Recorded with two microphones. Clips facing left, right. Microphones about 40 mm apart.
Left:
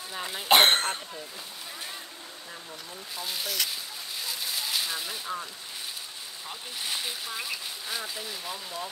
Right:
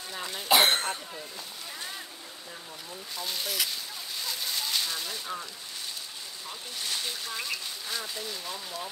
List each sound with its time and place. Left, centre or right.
0.1 s speech: centre
0.5 s cough: left
3.2 s speech: centre
4.2 s a sound: centre
6.8 s speech: centre